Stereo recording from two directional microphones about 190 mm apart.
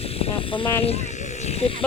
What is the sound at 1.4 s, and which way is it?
Sheep, 35° left (ahead or behind).